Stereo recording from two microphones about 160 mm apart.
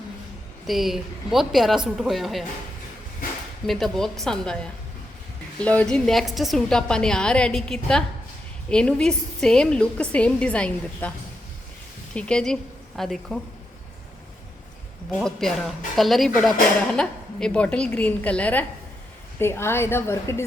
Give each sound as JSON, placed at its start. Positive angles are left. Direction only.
{"t": 0.7, "sound": "speech", "side_deg": 0}
{"t": 3.7, "sound": "a woman's voice", "side_deg": 0}
{"t": 12.1, "sound": "speech", "side_deg": 5}
{"t": 15.2, "sound": "a woman's voice", "side_deg": 5}